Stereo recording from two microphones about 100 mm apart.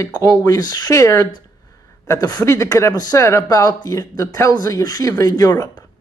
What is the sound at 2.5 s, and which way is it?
Speech, 30° left (ahead or behind).